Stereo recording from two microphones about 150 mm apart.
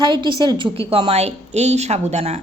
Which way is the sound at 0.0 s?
30° right (ahead or behind).